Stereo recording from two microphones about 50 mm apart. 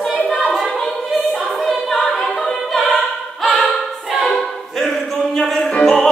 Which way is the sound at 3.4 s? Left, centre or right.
Centre.